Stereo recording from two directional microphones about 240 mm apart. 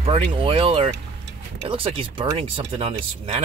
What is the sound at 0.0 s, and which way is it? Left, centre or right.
Speech, right.